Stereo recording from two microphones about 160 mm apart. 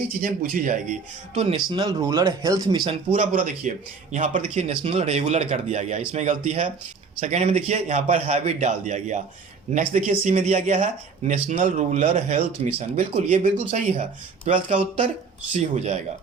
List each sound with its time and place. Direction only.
0.2 s speech: 60° right (ahead or behind); by 1.6 s 40° right (ahead or behind)
1.7 s speech: 25° right (ahead or behind)
3.2 s speech: 55° right (ahead or behind)